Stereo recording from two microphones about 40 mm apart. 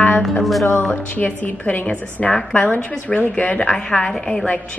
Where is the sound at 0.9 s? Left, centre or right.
Left.